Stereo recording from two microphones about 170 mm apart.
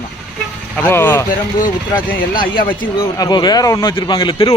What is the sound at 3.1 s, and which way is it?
A man's voice, 25° left (ahead or behind).